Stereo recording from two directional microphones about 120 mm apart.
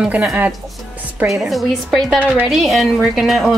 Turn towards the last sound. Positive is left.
turn(degrees=0)  # may be behind; listen again after turning